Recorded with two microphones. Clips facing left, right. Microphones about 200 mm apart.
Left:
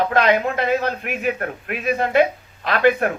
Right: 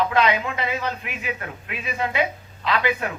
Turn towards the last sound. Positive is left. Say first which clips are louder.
# left 7 dB
turn(degrees=55)  # may be behind; listen again after turning